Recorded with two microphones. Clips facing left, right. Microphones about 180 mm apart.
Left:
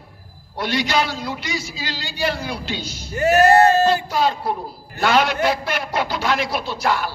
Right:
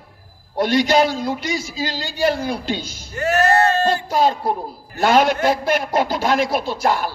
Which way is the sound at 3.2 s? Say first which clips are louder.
Left 3 dB; 10° left (ahead or behind).